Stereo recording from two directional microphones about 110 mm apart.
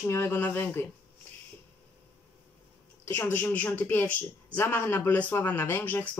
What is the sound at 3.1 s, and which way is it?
Speech, 15° left (ahead or behind).